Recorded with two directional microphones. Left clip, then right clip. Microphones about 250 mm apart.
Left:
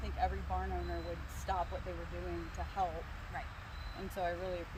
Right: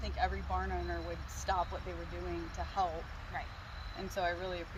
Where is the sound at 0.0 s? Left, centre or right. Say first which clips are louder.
Right 1 dB; centre.